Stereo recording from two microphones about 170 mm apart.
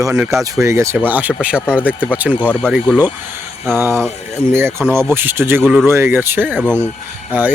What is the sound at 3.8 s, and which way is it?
Speech, 15° right (ahead or behind).